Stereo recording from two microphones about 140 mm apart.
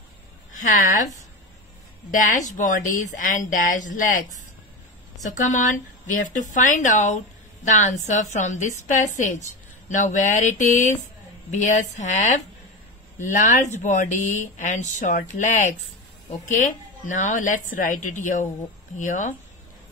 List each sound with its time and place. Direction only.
0.7 s a woman's voice: 65° left (ahead or behind)
2.0 s a woman's voice: 65° left (ahead or behind)
5.2 s a woman's voice: 60° left (ahead or behind)